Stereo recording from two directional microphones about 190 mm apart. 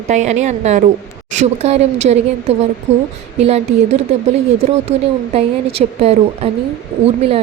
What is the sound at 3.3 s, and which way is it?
Speech, 35° right (ahead or behind).